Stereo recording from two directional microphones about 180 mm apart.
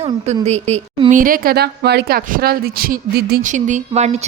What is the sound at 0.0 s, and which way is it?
Speech, 35° right (ahead or behind).